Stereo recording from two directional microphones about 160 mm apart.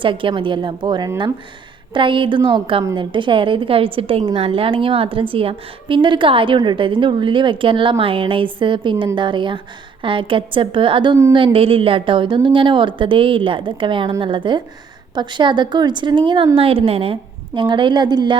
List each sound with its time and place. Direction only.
0.0 s a woman's voice: 30° right (ahead or behind)